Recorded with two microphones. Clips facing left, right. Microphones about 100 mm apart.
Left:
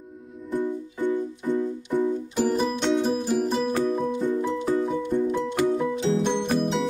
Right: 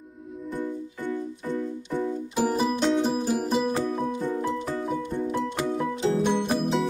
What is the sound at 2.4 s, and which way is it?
Music, 5° right (ahead or behind).